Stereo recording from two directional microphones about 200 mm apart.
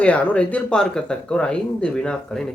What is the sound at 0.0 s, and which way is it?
Speech, 5° left (ahead or behind).